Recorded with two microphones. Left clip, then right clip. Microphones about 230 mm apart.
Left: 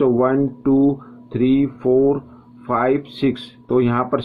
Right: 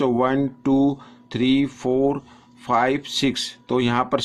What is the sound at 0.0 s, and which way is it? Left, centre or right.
Speech, right.